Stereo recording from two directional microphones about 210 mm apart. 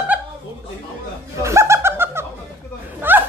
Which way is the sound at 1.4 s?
15° right (ahead or behind).